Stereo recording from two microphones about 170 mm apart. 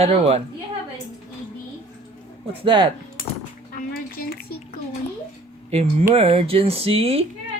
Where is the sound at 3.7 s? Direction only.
55° left (ahead or behind).